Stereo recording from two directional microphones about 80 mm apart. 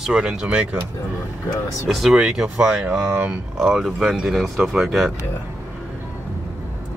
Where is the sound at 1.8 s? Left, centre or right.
Centre.